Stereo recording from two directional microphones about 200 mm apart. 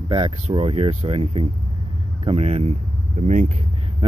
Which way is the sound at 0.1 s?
25° right (ahead or behind).